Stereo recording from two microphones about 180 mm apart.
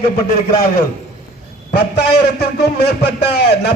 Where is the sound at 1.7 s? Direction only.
65° left (ahead or behind).